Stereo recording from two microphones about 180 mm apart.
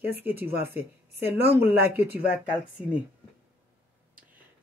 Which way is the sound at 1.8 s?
60° right (ahead or behind).